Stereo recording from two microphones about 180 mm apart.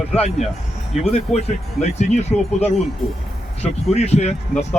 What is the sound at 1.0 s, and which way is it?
Speech, 35° left (ahead or behind).